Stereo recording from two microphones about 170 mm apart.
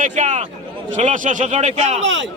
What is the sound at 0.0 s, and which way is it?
A man's voice, 45° right (ahead or behind).